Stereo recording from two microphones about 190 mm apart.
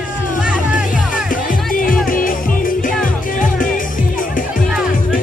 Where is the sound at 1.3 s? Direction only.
45° left (ahead or behind).